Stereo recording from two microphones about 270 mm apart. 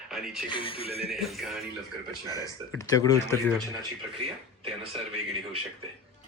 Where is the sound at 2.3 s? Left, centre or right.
Centre.